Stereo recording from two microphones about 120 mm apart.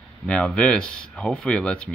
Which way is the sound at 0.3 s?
10° left (ahead or behind).